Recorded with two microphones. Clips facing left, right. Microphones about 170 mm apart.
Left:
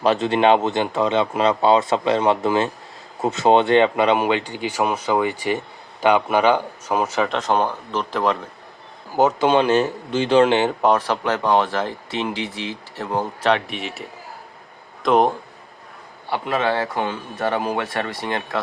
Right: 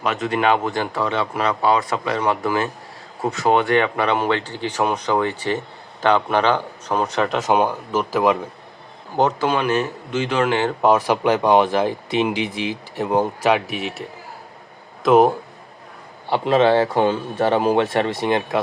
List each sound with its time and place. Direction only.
0.0 s speech: 30° left (ahead or behind); by 8.4 s 10° right (ahead or behind)
9.4 s speech: 25° left (ahead or behind)
10.8 s speech: centre (ahead or behind)
11.0 s speech: 15° right (ahead or behind)
16.3 s speech: 25° right (ahead or behind)